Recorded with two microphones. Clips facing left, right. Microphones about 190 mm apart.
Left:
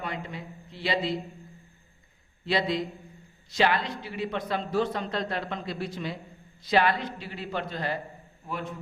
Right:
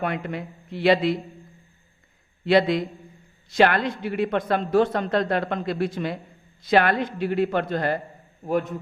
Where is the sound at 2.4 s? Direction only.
60° right (ahead or behind); by 8.7 s 45° right (ahead or behind).